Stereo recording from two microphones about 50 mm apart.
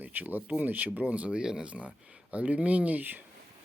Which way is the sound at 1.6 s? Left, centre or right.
Right.